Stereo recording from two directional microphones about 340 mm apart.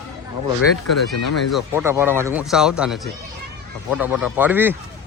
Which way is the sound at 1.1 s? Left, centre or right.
Left.